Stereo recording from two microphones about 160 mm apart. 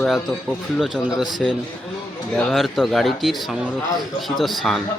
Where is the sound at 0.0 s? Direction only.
Centre (ahead or behind).